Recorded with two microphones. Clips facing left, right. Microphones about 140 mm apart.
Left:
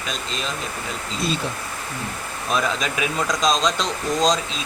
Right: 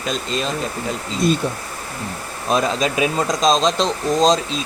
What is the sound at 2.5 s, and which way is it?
Speech, 30° right (ahead or behind).